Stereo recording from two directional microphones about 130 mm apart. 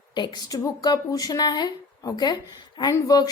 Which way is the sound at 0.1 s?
30° left (ahead or behind).